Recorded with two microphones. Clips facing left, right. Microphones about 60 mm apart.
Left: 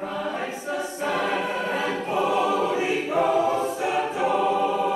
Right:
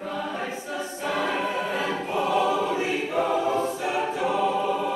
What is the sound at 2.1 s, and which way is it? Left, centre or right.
Choir, centre.